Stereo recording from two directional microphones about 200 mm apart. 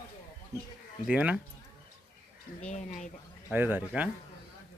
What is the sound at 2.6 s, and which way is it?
Speech, 35° left (ahead or behind).